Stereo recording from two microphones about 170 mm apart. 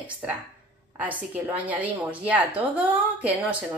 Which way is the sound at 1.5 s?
10° right (ahead or behind).